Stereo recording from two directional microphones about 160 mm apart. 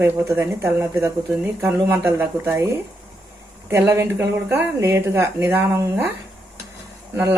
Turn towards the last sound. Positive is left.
turn(degrees=-15)  # may be behind; listen again after turning